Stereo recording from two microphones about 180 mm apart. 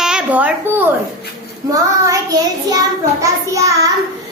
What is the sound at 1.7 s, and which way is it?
A child's voice, 20° right (ahead or behind).